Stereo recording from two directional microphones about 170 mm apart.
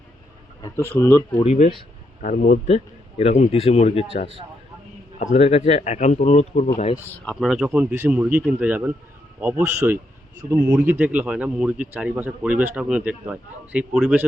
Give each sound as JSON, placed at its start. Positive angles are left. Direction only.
{"t": 0.6, "sound": "speech", "side_deg": 15}
{"t": 1.4, "sound": "speech", "side_deg": 40}
{"t": 2.2, "sound": "speech", "side_deg": 55}
{"t": 2.6, "sound": "speech", "side_deg": 35}
{"t": 5.2, "sound": "speech", "side_deg": 40}
{"t": 7.3, "sound": "a man's voice", "side_deg": 0}